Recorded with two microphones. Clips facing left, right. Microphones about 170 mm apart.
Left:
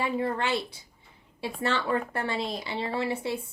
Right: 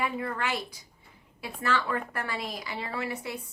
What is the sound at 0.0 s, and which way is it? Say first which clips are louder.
A woman's voice: left 3 dB; 30° left (ahead or behind).